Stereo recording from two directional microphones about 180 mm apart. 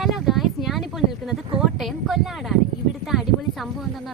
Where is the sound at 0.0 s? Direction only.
Centre (ahead or behind).